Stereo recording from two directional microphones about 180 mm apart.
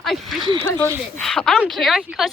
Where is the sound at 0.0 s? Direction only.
Centre (ahead or behind).